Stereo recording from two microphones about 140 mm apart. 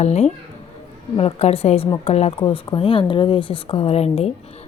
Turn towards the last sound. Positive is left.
turn(degrees=45)  # may be behind; listen again after turning